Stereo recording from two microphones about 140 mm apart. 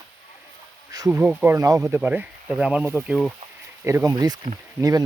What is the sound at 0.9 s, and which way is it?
Bee, 25° right (ahead or behind).